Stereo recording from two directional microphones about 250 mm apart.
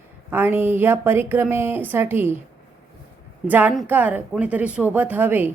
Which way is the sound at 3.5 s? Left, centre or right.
Centre.